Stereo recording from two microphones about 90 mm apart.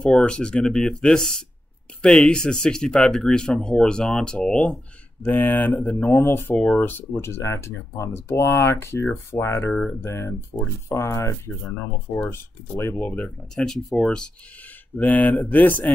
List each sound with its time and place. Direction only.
0.0 s speech: 10° left (ahead or behind)
6.0 s speech: 25° left (ahead or behind)
6.5 s speech: 10° left (ahead or behind)
6.8 s speech: 25° left (ahead or behind)
13.0 s speech: 15° left (ahead or behind)
13.7 s speech: 5° left (ahead or behind)